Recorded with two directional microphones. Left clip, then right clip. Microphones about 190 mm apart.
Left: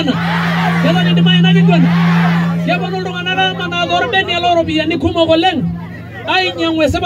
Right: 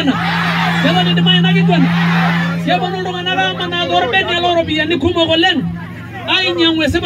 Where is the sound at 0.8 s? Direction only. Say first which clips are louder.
Right 1 dB; 15° left (ahead or behind).